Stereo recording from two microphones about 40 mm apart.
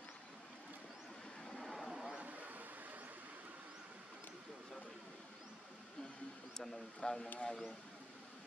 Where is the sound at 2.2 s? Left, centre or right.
Right.